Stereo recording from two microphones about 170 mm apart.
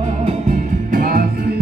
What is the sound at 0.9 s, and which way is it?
Music, 60° right (ahead or behind).